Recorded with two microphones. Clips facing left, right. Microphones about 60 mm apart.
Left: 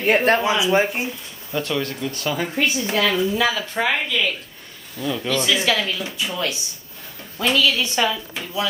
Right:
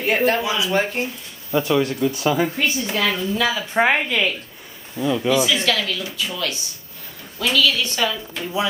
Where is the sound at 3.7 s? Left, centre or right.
Right.